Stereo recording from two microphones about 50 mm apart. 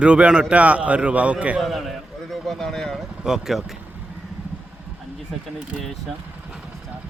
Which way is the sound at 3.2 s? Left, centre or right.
Centre.